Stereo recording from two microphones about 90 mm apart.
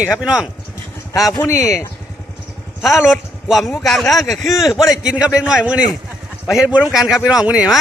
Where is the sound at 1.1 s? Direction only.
40° left (ahead or behind).